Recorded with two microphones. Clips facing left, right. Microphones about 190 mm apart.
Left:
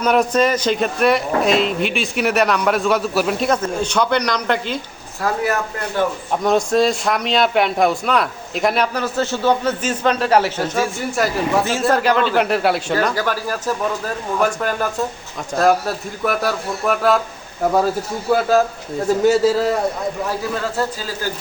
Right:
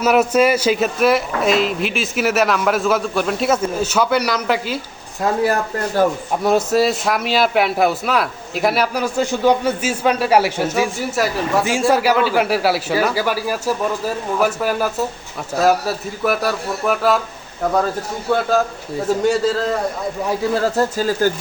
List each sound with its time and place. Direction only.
0.0 s a man's voice: 5° right (ahead or behind)
5.2 s speech: 30° right (ahead or behind)
6.3 s a man's voice: 5° right (ahead or behind)
11.2 s a man's voice: centre (ahead or behind)
18.3 s a man's voice: centre (ahead or behind)
20.7 s speech: 45° right (ahead or behind)